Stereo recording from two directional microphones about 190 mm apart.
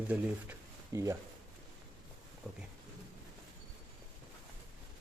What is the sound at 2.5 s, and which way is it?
Speech, centre (ahead or behind).